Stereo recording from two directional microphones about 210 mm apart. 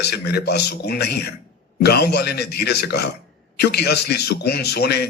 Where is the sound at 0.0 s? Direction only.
50° left (ahead or behind).